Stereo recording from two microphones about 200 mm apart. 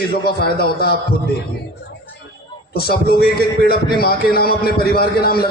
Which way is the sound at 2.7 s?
50° left (ahead or behind).